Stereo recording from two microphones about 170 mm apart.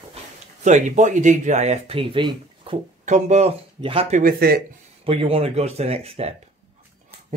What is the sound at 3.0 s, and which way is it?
Speech, 45° right (ahead or behind).